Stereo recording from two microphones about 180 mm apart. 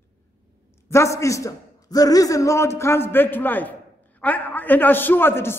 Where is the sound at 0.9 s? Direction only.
15° left (ahead or behind).